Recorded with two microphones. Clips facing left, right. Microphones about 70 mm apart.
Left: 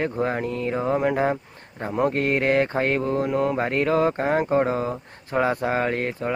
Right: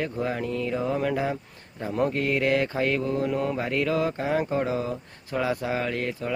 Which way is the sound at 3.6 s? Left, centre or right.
Left.